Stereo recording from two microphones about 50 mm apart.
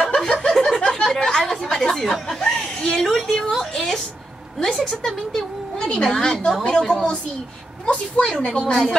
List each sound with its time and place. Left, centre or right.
0.1 s snicker: centre
1.4 s a sound: centre
4.6 s a woman's voice: centre